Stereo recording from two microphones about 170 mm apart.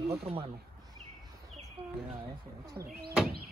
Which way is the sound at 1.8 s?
35° right (ahead or behind).